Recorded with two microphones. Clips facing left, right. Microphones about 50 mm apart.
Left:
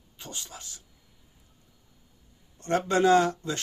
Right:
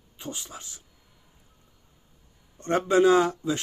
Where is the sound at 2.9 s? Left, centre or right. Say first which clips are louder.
Right 2 dB; centre.